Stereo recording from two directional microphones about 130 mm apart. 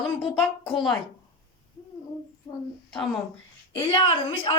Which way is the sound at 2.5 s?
25° left (ahead or behind).